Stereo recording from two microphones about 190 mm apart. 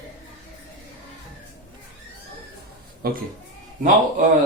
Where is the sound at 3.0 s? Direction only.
50° right (ahead or behind).